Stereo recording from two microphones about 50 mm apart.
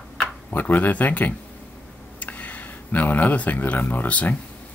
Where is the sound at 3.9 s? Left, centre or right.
Left.